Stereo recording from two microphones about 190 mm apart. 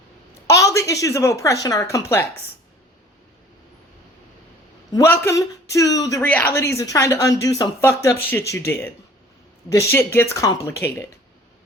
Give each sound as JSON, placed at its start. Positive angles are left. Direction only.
{"t": 0.4, "sound": "speech", "side_deg": 15}
{"t": 4.9, "sound": "speech", "side_deg": 15}